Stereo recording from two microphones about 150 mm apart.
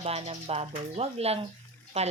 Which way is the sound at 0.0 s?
45° right (ahead or behind).